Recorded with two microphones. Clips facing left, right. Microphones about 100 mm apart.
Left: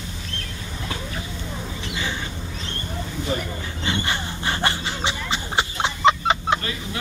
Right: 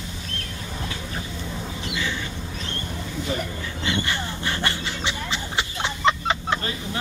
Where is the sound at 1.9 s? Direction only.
40° left (ahead or behind).